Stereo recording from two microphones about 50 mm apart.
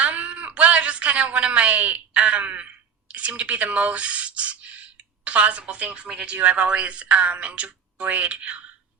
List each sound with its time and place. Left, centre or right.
0.0 s wail: right
6.4 s a woman's voice: right